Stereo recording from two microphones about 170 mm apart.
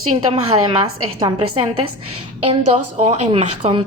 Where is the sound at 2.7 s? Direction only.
40° right (ahead or behind).